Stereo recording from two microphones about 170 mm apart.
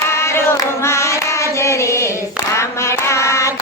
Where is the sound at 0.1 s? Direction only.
15° left (ahead or behind).